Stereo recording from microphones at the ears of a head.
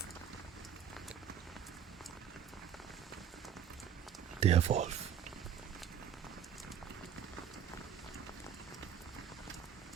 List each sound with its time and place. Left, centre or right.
4.4 s speech: right